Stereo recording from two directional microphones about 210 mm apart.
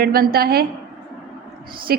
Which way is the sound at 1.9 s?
45° right (ahead or behind).